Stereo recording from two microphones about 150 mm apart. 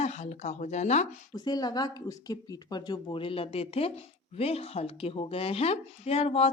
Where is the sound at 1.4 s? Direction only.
25° left (ahead or behind).